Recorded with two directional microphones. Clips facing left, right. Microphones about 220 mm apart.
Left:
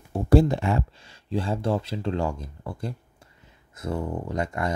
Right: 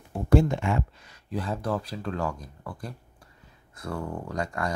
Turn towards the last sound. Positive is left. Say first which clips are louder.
# left 3 dB
turn(degrees=20)  # may be behind; listen again after turning